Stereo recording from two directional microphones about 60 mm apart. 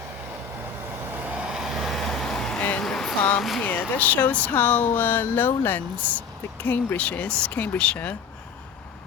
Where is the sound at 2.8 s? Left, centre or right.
Centre.